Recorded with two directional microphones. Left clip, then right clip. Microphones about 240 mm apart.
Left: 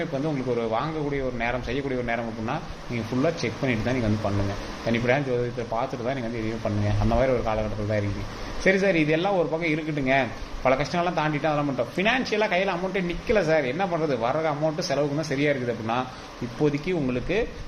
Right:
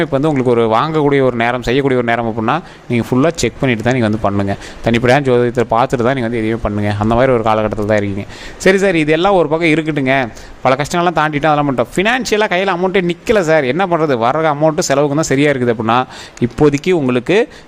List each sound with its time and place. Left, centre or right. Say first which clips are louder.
0.0 s a man's voice: right 14 dB; right